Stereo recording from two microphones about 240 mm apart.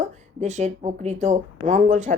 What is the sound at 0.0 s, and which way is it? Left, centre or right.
Speech, right.